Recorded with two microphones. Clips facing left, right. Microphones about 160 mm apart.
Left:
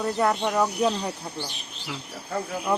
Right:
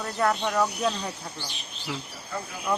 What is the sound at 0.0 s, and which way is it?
Speech, 20° left (ahead or behind).